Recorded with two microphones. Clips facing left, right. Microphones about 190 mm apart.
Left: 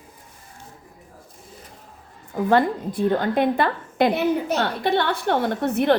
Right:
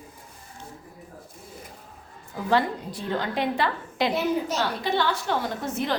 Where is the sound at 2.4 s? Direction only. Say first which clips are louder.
Left 5 dB; 55° left (ahead or behind).